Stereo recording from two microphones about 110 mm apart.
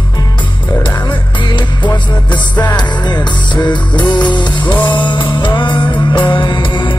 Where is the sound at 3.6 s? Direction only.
45° left (ahead or behind).